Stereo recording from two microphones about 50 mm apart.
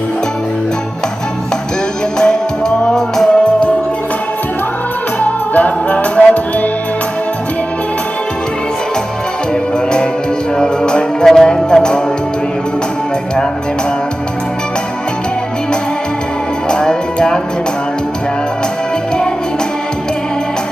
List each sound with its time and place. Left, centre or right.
2.1 s music: centre
5.2 s music: left
10.6 s music: centre
16.6 s music: centre